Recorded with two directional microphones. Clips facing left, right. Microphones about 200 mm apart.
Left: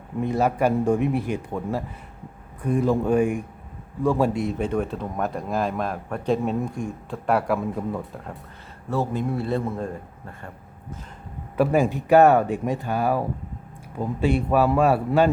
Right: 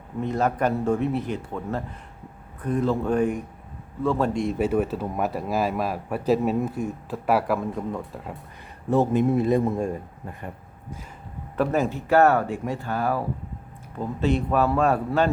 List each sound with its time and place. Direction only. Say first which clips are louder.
0.2 s speech: left 2 dB; 10° left (ahead or behind)
8.9 s a man's voice: right 5 dB; 20° right (ahead or behind)
11.5 s speech: left 3 dB; 10° left (ahead or behind)